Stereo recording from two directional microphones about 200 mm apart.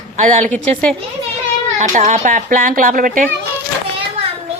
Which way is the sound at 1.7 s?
35° right (ahead or behind).